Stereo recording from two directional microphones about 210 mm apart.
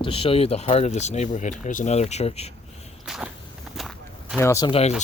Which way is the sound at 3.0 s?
Centre (ahead or behind).